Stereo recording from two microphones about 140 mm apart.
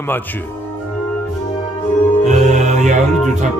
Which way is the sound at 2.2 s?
60° right (ahead or behind).